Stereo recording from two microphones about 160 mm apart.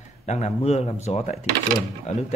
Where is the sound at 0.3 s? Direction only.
45° left (ahead or behind).